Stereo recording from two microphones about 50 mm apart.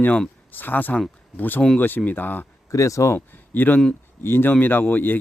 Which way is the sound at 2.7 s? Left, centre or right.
Left.